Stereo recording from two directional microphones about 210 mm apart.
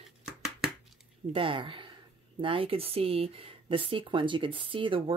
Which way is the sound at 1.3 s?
25° right (ahead or behind).